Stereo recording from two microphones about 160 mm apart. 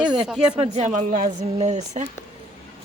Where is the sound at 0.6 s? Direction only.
45° right (ahead or behind).